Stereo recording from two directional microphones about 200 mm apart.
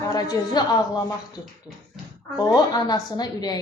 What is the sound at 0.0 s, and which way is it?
A woman's voice, 20° left (ahead or behind).